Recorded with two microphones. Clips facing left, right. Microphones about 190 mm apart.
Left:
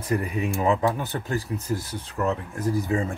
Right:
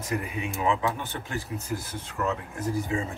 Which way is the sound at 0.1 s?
40° left (ahead or behind).